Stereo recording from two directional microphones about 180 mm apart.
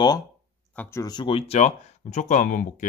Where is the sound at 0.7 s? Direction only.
10° left (ahead or behind).